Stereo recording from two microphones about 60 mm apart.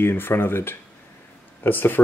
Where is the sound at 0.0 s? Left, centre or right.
Left.